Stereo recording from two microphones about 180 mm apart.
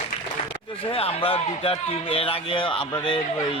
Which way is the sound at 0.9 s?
30° left (ahead or behind).